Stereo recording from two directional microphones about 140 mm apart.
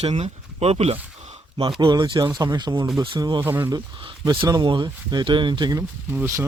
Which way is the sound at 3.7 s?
30° right (ahead or behind).